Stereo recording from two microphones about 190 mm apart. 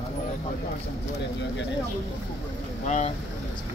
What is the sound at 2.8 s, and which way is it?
Speech, 40° left (ahead or behind).